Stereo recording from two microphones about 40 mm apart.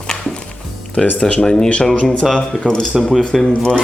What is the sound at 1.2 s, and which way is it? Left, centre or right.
Speech, left.